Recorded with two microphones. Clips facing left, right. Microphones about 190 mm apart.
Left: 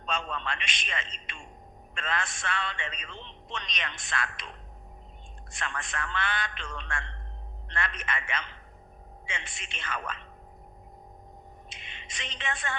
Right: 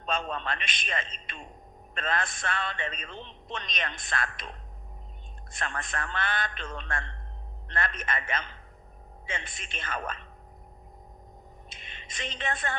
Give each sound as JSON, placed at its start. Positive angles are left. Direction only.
{"t": 0.2, "sound": "a man's voice", "side_deg": -40}
{"t": 5.5, "sound": "a man's voice", "side_deg": -50}
{"t": 11.8, "sound": "a woman's voice", "side_deg": -45}